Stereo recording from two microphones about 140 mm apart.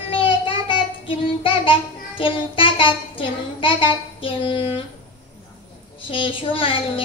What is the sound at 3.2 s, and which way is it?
A woman's voice, 40° left (ahead or behind).